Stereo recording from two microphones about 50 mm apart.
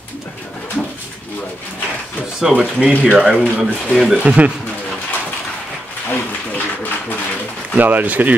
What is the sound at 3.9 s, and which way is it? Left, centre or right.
Speech, centre.